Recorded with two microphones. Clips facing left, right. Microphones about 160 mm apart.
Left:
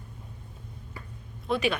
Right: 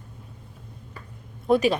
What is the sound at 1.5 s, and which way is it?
Speech, 40° right (ahead or behind).